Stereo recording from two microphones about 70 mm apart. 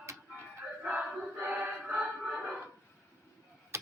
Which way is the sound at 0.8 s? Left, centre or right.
Centre.